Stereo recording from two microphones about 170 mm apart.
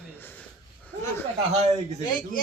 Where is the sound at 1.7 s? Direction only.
40° right (ahead or behind).